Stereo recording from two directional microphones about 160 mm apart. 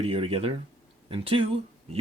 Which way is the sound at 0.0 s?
35° right (ahead or behind).